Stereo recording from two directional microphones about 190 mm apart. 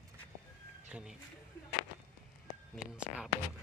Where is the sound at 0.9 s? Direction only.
5° right (ahead or behind).